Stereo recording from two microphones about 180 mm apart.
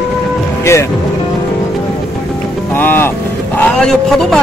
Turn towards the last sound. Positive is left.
turn(degrees=5)  # may be behind; listen again after turning